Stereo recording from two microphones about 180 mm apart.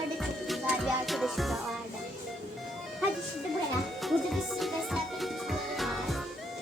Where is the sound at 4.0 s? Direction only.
Centre (ahead or behind).